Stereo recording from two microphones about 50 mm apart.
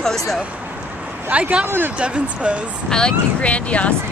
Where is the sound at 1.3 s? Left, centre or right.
Right.